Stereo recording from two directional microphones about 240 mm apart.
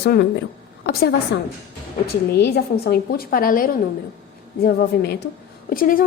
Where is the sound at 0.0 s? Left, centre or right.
Left.